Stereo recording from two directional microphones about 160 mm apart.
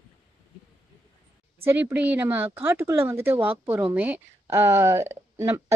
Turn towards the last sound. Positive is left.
turn(degrees=-15)  # may be behind; listen again after turning